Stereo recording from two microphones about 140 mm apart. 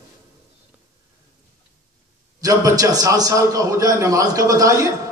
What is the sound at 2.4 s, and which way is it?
A man's voice, 25° right (ahead or behind).